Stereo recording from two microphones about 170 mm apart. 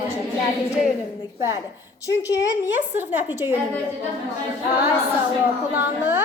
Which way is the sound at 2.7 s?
10° right (ahead or behind).